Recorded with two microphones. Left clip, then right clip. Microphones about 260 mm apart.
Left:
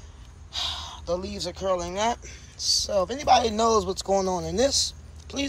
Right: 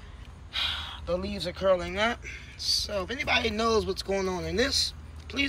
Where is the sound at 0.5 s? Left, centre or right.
Centre.